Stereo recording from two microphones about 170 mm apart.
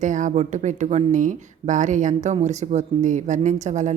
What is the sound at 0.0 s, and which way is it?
A woman's voice, 45° right (ahead or behind).